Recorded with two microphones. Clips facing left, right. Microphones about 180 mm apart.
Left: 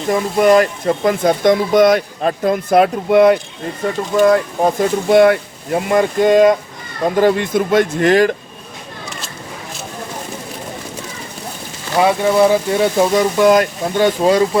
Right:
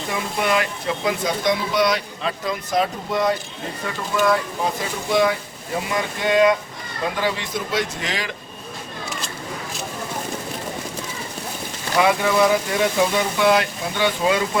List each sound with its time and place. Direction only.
0.1 s speech: 45° left (ahead or behind); by 3.3 s 65° left (ahead or behind)
3.8 s speech: 40° left (ahead or behind)
12.0 s speech: 30° left (ahead or behind)